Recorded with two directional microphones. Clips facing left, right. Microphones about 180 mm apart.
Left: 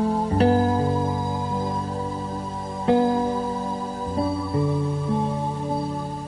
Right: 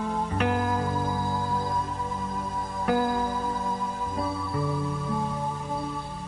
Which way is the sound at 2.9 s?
25° left (ahead or behind).